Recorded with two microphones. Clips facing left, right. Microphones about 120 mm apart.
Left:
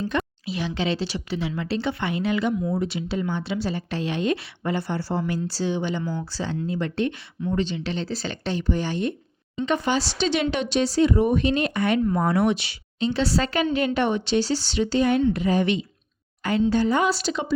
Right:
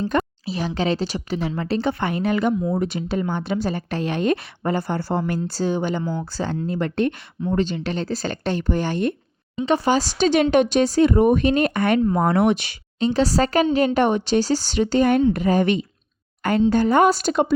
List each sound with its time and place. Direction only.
0.0 s a woman's voice: 35° right (ahead or behind)
9.6 s a woman's voice: 35° right (ahead or behind); by 17.5 s 50° right (ahead or behind)